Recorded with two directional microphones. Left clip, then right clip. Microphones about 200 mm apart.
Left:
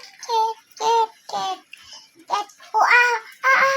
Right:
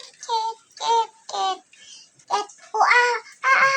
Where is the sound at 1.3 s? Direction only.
30° left (ahead or behind).